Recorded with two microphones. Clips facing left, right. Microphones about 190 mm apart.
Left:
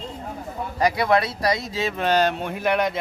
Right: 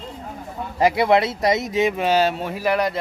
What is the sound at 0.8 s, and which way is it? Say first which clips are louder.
Speech: right 3 dB; 25° right (ahead or behind).